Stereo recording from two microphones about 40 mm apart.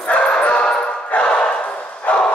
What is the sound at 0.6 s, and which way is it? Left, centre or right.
Music, left.